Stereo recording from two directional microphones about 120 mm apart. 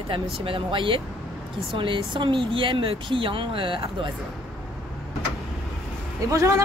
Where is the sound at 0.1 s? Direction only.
50° right (ahead or behind).